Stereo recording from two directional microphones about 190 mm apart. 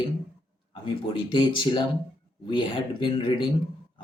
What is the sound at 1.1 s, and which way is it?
Speech, 25° left (ahead or behind).